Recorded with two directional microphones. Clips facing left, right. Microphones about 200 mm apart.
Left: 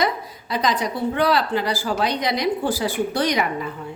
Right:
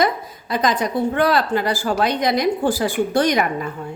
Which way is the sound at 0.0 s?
50° right (ahead or behind).